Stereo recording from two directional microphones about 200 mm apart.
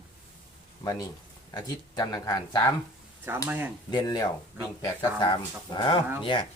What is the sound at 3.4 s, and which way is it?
Speech, 10° right (ahead or behind).